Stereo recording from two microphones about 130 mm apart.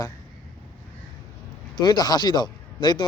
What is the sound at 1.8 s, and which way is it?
Speech, 30° left (ahead or behind).